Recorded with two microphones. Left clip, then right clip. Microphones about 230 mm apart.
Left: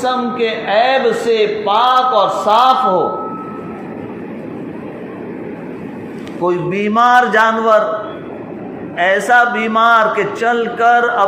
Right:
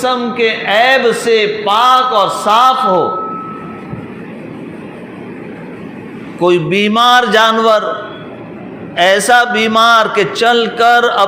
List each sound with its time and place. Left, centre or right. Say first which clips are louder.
0.0 s a man's voice: right 3 dB; right
6.7 s a sound: left 1 dB; right
7.3 s a man's voice: right 2 dB; right
9.0 s a man's voice: right 2 dB; right